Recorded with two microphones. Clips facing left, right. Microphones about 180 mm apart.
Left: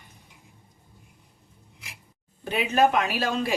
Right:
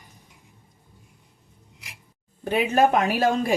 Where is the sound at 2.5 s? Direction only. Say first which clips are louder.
Right 2 dB; 45° right (ahead or behind).